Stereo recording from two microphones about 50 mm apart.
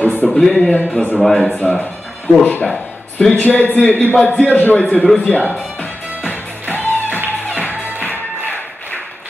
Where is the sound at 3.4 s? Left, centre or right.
Left.